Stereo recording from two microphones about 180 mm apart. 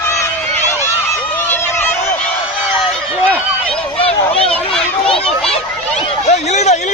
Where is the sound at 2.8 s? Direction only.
10° right (ahead or behind).